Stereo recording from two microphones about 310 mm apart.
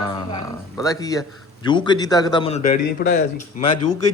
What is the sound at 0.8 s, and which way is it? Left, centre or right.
A man's voice, centre.